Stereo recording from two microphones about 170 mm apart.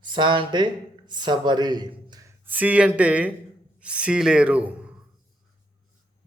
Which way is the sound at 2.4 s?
10° right (ahead or behind).